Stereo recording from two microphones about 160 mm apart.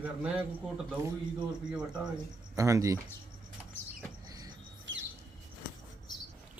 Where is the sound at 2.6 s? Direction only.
20° right (ahead or behind).